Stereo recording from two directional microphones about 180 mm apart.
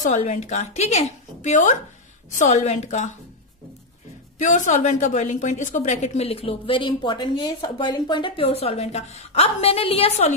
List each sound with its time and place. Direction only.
0.0 s a woman's voice: 40° left (ahead or behind)
4.4 s a woman's voice: 45° left (ahead or behind)